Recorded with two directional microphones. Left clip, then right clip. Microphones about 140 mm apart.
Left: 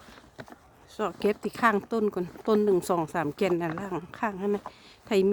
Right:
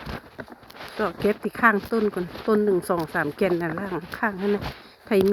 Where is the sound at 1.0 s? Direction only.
15° left (ahead or behind).